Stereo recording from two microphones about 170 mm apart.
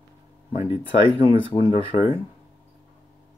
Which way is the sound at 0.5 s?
30° left (ahead or behind).